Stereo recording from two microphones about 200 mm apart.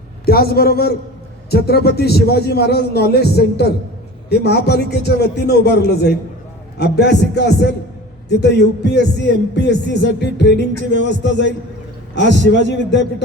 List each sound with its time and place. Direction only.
0.3 s a man's voice: 50° left (ahead or behind)